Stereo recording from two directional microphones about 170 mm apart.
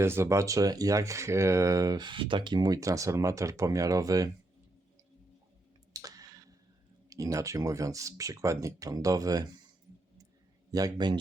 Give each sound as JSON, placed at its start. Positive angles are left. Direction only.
{"t": 0.0, "sound": "speech", "side_deg": -15}
{"t": 5.9, "sound": "clicking", "side_deg": -20}
{"t": 7.1, "sound": "speech", "side_deg": -20}
{"t": 10.7, "sound": "speech", "side_deg": -20}